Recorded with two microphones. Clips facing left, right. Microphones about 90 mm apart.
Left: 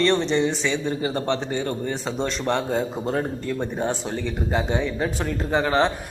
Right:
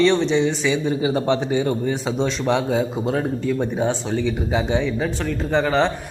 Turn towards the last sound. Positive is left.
turn(degrees=5)  # may be behind; listen again after turning